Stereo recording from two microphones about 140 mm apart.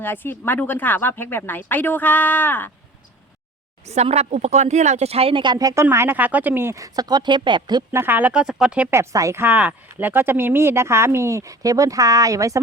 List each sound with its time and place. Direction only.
0.0 s speech: 15° left (ahead or behind)
3.8 s speech: 50° right (ahead or behind); by 7.9 s 30° right (ahead or behind)
7.9 s speech: 15° right (ahead or behind)